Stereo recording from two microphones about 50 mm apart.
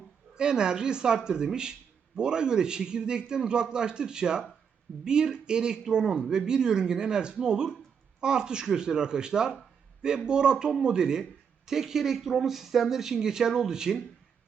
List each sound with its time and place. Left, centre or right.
0.3 s speech: centre